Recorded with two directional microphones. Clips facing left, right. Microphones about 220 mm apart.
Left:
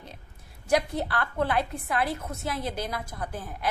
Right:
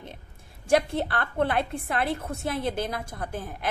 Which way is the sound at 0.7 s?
25° right (ahead or behind).